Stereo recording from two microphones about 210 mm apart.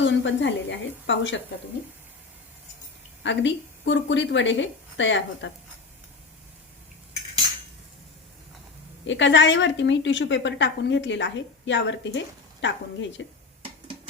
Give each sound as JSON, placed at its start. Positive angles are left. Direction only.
{"t": 0.0, "sound": "a woman's voice", "side_deg": 60}
{"t": 3.2, "sound": "a woman's voice", "side_deg": 60}
{"t": 9.0, "sound": "a woman's voice", "side_deg": 60}